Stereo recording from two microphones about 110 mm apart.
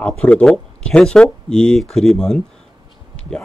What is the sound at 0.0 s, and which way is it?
Speech, 10° left (ahead or behind).